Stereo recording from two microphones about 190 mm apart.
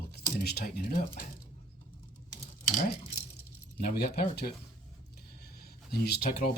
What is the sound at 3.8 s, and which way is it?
Speech, 55° left (ahead or behind).